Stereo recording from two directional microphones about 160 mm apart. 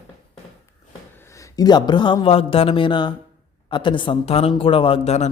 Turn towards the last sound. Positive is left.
turn(degrees=40)  # may be behind; listen again after turning